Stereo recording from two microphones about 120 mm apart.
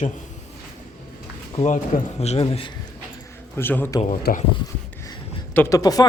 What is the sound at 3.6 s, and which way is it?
Speech, 15° left (ahead or behind).